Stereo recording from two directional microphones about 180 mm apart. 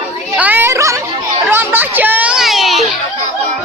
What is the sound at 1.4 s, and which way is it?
Children playing, 10° right (ahead or behind).